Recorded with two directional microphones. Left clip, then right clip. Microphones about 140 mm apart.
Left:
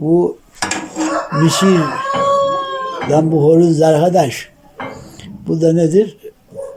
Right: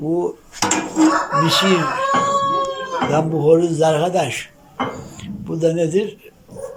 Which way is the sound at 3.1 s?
45° left (ahead or behind).